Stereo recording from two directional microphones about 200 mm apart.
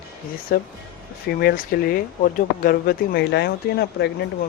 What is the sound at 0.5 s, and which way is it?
Speech, 50° left (ahead or behind).